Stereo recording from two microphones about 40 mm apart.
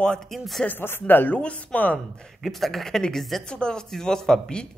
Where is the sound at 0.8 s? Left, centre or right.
Left.